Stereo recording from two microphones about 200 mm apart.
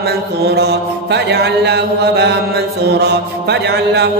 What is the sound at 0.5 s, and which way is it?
Mantra, 55° right (ahead or behind).